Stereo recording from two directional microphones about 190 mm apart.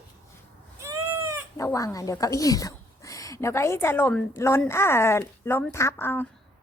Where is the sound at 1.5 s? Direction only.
15° left (ahead or behind).